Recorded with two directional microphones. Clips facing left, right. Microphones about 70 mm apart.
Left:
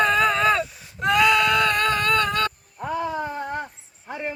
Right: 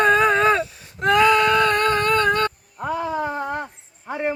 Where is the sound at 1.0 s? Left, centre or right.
Right.